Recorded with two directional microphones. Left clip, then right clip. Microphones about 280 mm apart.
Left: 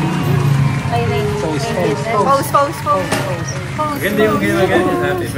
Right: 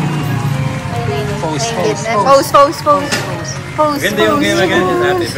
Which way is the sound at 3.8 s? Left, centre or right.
Right.